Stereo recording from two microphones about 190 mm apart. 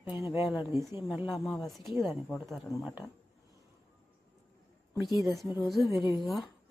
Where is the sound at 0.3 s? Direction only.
15° right (ahead or behind).